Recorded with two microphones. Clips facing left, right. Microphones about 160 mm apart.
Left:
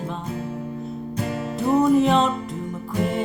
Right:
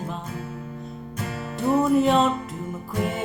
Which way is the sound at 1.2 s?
20° left (ahead or behind).